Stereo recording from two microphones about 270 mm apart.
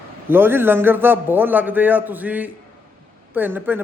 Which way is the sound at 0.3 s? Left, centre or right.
Centre.